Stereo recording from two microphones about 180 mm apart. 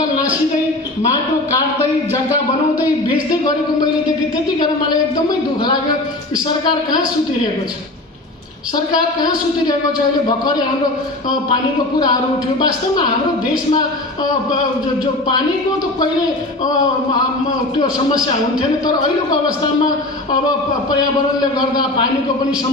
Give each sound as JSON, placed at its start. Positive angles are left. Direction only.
{"t": 12.0, "sound": "a woman's voice", "side_deg": 25}